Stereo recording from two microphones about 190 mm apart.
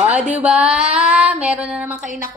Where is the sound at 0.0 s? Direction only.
5° right (ahead or behind).